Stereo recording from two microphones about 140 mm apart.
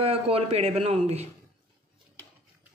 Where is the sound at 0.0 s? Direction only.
45° right (ahead or behind).